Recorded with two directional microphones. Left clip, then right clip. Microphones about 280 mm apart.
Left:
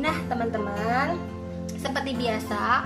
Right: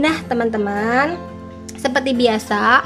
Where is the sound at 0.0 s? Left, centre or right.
Right.